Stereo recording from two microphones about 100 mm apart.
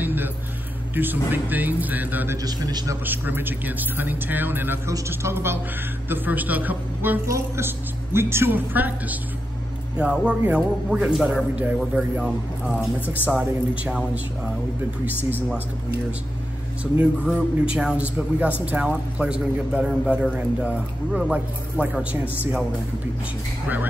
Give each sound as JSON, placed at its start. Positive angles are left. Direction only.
{"t": 0.0, "sound": "music", "side_deg": -20}
{"t": 0.9, "sound": "speech", "side_deg": -20}
{"t": 2.4, "sound": "a man's voice", "side_deg": -40}
{"t": 3.1, "sound": "a woman's voice", "side_deg": -20}
{"t": 7.2, "sound": "a woman's voice", "side_deg": -30}
{"t": 13.0, "sound": "a man's voice", "side_deg": 20}
{"t": 13.3, "sound": "a woman's voice", "side_deg": -10}
{"t": 16.9, "sound": "speech", "side_deg": -15}
{"t": 17.3, "sound": "speech", "side_deg": -5}